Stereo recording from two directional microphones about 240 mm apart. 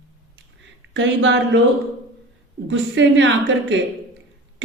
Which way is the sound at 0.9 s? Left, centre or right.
Right.